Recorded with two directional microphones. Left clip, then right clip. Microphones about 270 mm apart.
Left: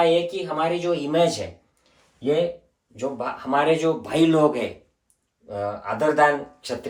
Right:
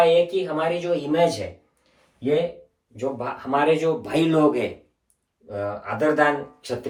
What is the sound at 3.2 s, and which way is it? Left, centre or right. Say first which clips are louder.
Speech: left 1 dB; centre.